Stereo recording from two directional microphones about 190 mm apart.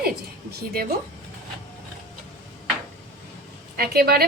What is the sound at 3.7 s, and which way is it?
Speech, 55° right (ahead or behind).